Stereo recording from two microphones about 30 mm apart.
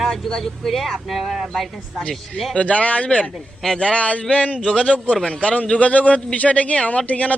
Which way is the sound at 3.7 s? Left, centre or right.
Left.